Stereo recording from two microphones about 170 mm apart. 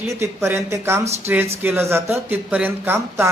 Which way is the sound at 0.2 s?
15° right (ahead or behind).